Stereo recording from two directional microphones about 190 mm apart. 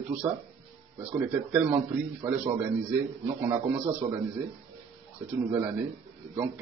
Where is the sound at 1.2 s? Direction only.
10° right (ahead or behind).